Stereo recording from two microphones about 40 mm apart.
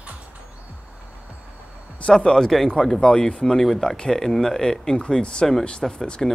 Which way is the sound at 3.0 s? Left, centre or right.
Centre.